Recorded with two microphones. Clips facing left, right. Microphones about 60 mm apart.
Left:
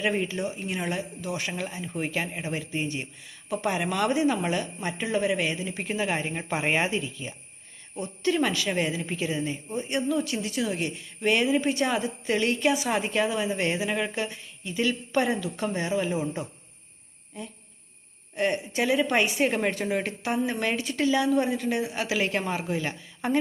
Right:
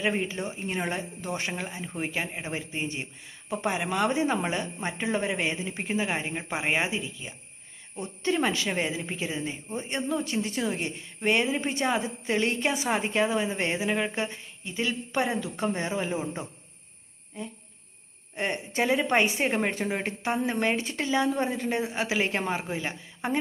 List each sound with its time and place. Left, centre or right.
0.0 s speech: centre
0.3 s a woman's voice: right
6.3 s speech: centre
7.9 s a woman's voice: right
18.3 s a woman's voice: right